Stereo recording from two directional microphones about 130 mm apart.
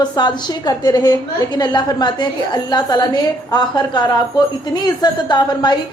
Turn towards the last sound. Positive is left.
turn(degrees=35)  # may be behind; listen again after turning